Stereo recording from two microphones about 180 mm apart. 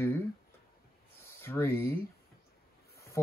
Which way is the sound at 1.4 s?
15° left (ahead or behind).